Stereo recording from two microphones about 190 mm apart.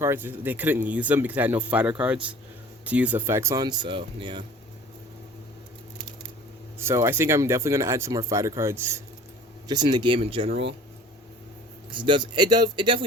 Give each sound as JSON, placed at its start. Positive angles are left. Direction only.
{"t": 0.0, "sound": "speech", "side_deg": -10}
{"t": 6.7, "sound": "speech", "side_deg": -15}
{"t": 11.9, "sound": "speech", "side_deg": -25}